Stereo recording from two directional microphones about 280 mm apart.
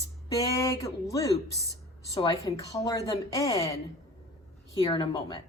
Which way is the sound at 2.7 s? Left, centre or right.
Centre.